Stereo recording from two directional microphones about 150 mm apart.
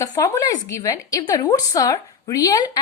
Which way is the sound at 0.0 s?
20° left (ahead or behind).